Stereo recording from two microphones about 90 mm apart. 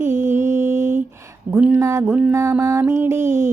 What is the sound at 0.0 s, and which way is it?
Mantra, 25° right (ahead or behind).